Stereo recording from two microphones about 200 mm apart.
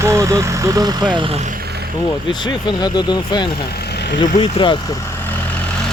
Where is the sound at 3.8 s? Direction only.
60° left (ahead or behind).